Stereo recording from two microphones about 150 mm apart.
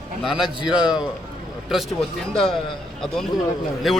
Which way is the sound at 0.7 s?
5° right (ahead or behind).